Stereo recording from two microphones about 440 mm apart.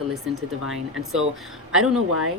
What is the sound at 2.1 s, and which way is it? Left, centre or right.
Speech, right.